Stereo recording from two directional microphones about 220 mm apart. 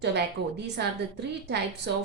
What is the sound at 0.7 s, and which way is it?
A woman's voice, 50° right (ahead or behind).